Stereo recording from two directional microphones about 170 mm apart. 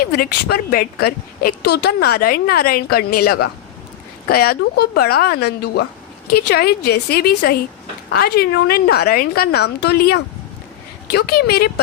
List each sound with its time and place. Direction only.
0.0 s a woman's voice: 65° left (ahead or behind)